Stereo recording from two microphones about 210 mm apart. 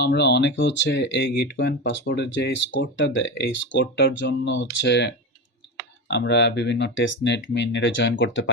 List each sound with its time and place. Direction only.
0.0 s speech: 55° left (ahead or behind)